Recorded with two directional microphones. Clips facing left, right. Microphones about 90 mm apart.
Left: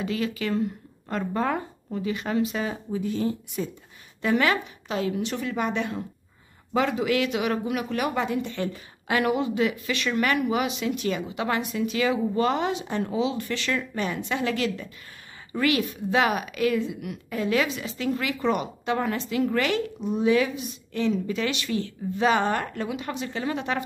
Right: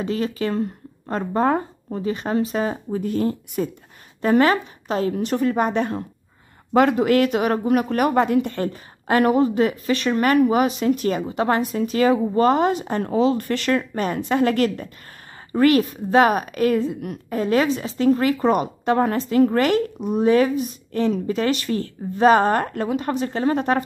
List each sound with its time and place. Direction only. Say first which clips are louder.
0.0 s speech: right 4 dB; 35° right (ahead or behind)
4.2 s a woman's voice: right 6 dB; 40° right (ahead or behind)
6.7 s a woman's voice: right 7 dB; 55° right (ahead or behind)